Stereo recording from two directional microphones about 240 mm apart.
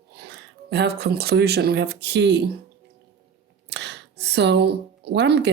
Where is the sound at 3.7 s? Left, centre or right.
Right.